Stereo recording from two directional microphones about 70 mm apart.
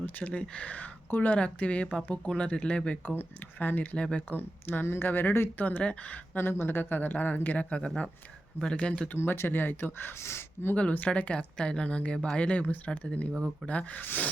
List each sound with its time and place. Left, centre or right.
0.0 s speech: centre
3.2 s speech: left
3.9 s speech: centre
4.4 s speech: left
6.3 s speech: left; by 9.0 s centre
9.1 s speech: left
10.8 s speech: centre